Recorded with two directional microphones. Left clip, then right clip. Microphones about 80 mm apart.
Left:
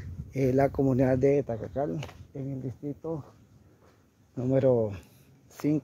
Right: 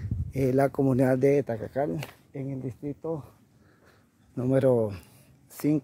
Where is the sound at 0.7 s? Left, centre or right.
Right.